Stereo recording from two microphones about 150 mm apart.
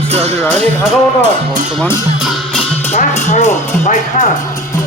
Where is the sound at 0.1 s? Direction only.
45° right (ahead or behind).